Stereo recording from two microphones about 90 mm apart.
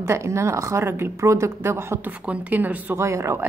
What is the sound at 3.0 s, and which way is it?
Speech, 35° right (ahead or behind).